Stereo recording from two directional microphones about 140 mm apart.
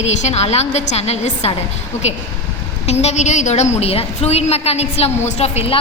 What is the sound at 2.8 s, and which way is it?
A woman's voice, 50° left (ahead or behind).